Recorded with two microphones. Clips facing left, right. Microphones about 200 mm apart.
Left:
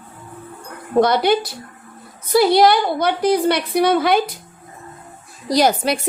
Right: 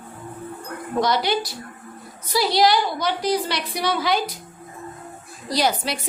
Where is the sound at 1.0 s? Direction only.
55° left (ahead or behind).